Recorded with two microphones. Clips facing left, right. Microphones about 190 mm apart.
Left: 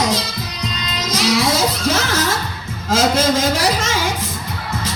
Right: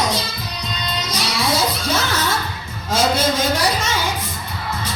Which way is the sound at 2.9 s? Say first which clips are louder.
Left 2 dB; 90° left.